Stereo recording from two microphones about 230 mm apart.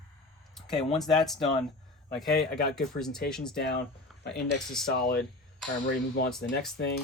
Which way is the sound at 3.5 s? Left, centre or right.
Left.